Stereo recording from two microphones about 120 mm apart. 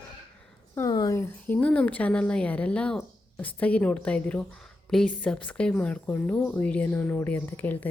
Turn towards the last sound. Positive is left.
turn(degrees=15)  # may be behind; listen again after turning